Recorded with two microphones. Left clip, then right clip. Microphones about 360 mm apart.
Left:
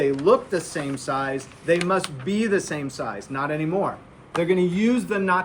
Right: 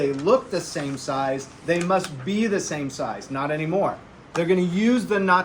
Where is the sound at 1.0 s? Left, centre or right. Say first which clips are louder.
Right 2 dB; left.